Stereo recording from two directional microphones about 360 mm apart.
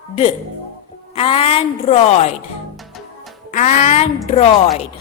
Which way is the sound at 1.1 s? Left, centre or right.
Centre.